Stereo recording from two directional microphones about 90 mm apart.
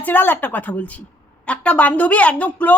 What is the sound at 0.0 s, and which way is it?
Speech, 20° left (ahead or behind).